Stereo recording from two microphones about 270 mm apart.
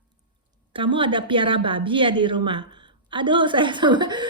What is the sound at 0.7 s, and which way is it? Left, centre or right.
Speech, centre.